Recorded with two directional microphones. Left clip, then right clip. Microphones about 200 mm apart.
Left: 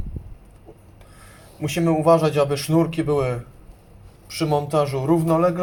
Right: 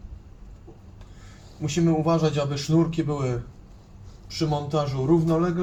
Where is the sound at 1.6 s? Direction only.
45° left (ahead or behind).